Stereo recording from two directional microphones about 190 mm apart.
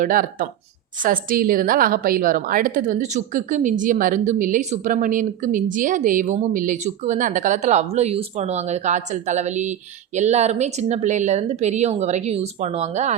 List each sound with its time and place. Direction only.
0.0 s a woman's voice: 45° right (ahead or behind)